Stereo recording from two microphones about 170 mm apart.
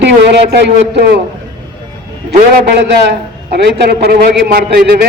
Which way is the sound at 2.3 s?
80° right.